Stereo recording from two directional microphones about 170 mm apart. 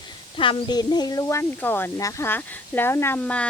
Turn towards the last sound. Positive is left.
turn(degrees=10)  # may be behind; listen again after turning